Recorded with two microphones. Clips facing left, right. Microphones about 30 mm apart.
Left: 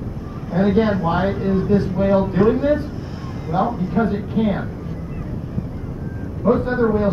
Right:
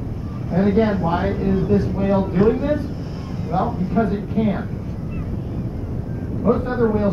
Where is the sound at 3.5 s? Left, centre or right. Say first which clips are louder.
Left 1 dB; centre.